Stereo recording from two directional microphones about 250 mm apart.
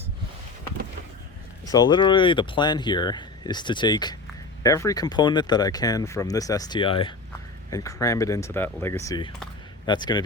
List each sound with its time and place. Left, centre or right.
1.6 s speech: centre